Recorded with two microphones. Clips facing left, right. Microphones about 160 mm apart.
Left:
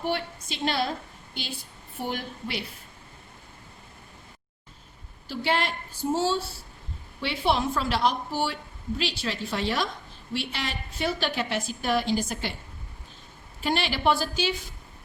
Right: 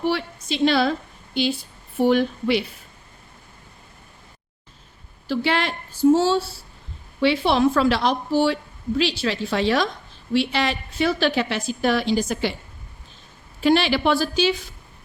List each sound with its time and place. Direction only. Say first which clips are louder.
0.1 s a woman's voice: right 5 dB; 90° right
5.3 s a woman's voice: right 5 dB; 90° right
13.6 s a woman's voice: right 9 dB; 90° right